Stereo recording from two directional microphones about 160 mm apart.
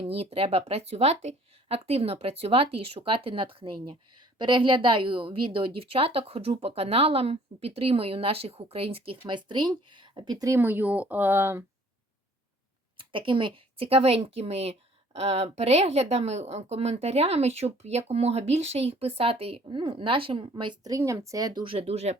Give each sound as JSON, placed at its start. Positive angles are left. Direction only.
{"t": 0.1, "sound": "a woman's voice", "side_deg": -40}
{"t": 13.0, "sound": "a woman's voice", "side_deg": -30}